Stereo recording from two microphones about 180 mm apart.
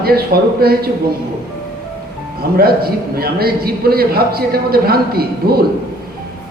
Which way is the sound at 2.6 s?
60° right (ahead or behind).